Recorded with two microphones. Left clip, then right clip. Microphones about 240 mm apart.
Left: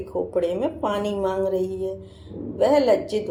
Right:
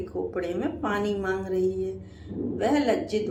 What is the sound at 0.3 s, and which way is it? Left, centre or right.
A woman's voice, left.